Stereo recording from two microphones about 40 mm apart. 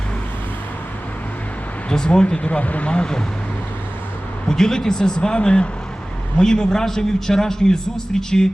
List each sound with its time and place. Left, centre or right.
1.9 s speech: left
2.5 s speech: left
4.4 s a man's voice: centre